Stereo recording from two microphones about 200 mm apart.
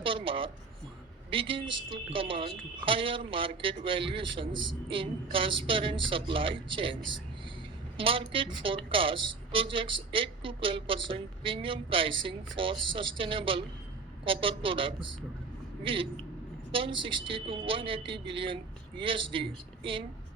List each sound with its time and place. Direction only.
0.0 s a sound: 25° right (ahead or behind)
1.3 s a woman's voice: 25° right (ahead or behind)
7.9 s a woman's voice: 25° right (ahead or behind)